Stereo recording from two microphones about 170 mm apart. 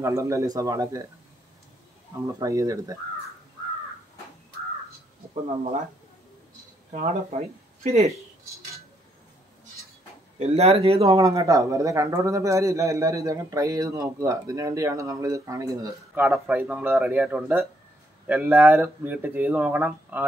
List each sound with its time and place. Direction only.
0.0 s speech: 20° right (ahead or behind)
2.2 s speech: 20° right (ahead or behind)
6.9 s speech: 45° right (ahead or behind)
10.4 s speech: 35° right (ahead or behind)
11.1 s speech: 20° right (ahead or behind)